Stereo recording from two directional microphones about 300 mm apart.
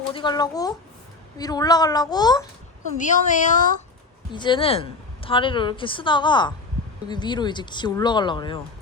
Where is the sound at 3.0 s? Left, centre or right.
Left.